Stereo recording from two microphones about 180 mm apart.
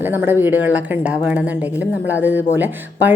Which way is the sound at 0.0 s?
10° right (ahead or behind).